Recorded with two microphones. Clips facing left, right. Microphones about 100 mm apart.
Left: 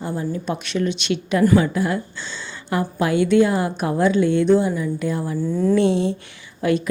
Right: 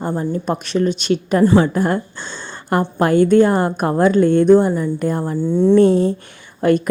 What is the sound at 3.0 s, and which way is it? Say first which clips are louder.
A woman's voice: right 4 dB; 45° right (ahead or behind).